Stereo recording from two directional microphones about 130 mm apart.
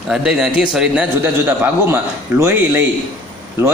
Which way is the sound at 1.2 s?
15° right (ahead or behind).